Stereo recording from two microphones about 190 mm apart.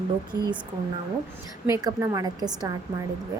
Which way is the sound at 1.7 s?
20° right (ahead or behind).